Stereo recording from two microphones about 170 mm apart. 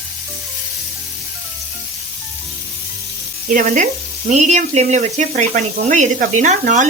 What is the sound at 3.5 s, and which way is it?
Speech, 50° right (ahead or behind).